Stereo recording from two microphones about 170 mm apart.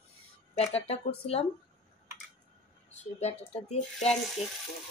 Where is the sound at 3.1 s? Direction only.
40° left (ahead or behind).